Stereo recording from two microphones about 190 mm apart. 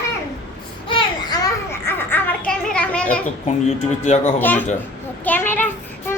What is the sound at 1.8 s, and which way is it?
Children playing, 10° left (ahead or behind).